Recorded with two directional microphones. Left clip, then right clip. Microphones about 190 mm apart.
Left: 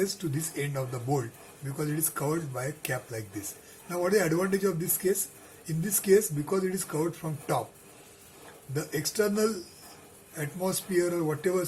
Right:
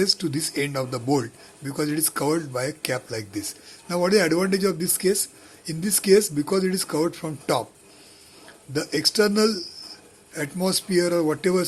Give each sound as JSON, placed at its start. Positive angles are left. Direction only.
{"t": 0.0, "sound": "speech", "side_deg": -45}
{"t": 8.7, "sound": "speech", "side_deg": -45}